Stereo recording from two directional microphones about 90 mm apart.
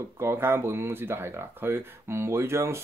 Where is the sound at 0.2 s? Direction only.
25° right (ahead or behind).